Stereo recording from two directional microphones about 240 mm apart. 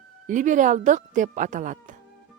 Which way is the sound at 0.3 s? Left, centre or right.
Right.